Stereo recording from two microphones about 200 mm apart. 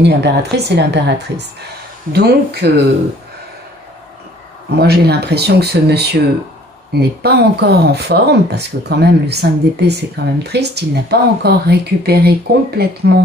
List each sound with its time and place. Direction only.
0.0 s speech: 55° right (ahead or behind)
4.7 s speech: 55° right (ahead or behind)